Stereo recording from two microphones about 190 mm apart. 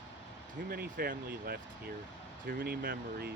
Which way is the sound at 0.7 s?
50° right (ahead or behind).